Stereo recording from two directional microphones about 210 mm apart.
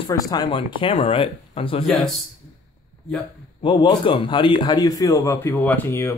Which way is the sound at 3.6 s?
20° left (ahead or behind).